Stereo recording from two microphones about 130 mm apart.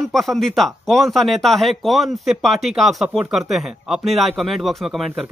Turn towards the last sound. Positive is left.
turn(degrees=0)  # may be behind; listen again after turning